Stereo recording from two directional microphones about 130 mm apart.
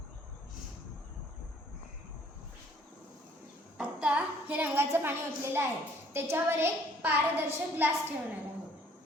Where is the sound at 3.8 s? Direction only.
10° right (ahead or behind).